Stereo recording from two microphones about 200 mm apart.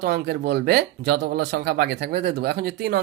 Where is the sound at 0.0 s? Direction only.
55° right (ahead or behind).